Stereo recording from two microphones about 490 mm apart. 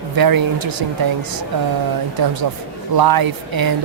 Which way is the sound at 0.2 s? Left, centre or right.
Right.